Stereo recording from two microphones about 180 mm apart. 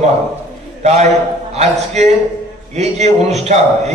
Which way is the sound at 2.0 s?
40° right (ahead or behind).